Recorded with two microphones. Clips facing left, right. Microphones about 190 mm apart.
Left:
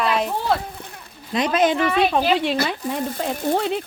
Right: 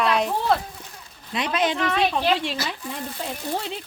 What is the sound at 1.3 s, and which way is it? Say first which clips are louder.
Speech: left 5 dB; 45° left (ahead or behind).